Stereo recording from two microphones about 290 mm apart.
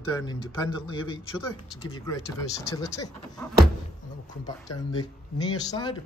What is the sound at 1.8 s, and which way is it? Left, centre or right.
Speech, centre.